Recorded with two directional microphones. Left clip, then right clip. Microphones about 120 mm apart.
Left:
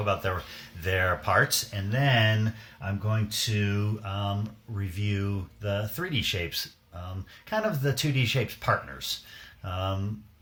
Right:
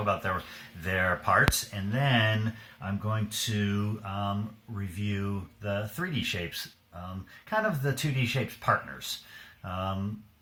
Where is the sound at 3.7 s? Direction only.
20° left (ahead or behind).